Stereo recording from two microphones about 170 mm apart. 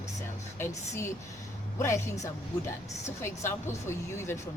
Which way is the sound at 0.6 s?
15° left (ahead or behind).